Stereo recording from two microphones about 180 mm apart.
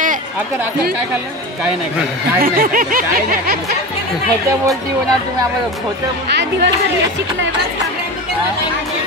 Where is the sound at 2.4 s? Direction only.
50° right (ahead or behind).